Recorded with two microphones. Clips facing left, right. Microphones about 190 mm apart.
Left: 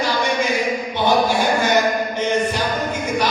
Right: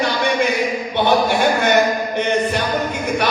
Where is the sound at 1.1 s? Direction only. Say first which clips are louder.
Right 1 dB; 60° right (ahead or behind).